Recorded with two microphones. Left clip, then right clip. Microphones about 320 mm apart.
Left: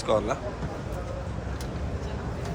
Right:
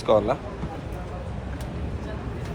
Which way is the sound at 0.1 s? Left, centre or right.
Centre.